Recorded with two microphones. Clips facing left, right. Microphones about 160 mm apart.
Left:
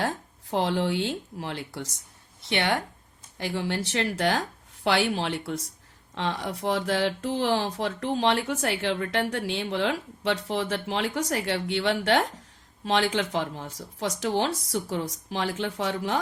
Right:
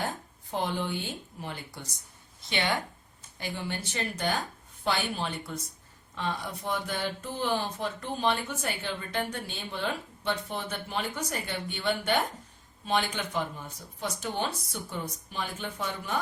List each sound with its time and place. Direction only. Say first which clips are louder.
0.5 s speech: left 6 dB; 90° left
2.4 s speech: left 4 dB; 70° left (ahead or behind); by 16.1 s 90° left